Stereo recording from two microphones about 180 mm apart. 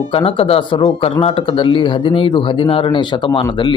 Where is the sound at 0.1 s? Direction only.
30° left (ahead or behind).